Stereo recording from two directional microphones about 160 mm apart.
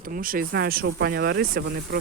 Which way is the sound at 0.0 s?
60° right (ahead or behind).